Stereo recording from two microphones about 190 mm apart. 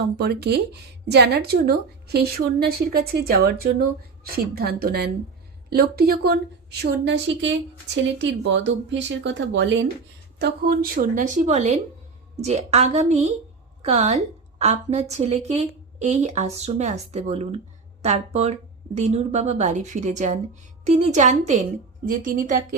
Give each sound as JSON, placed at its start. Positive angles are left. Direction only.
{"t": 0.2, "sound": "speech", "side_deg": -60}
{"t": 10.3, "sound": "a woman's voice", "side_deg": -55}